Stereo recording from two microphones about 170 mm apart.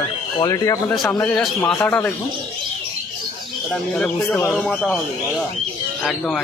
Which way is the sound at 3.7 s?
5° left (ahead or behind).